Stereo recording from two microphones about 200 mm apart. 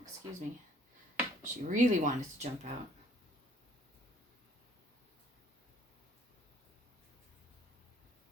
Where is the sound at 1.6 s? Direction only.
40° right (ahead or behind).